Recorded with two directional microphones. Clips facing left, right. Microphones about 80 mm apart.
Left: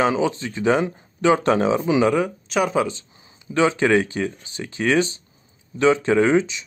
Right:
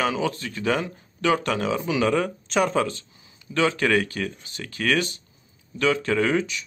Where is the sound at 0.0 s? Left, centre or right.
Left.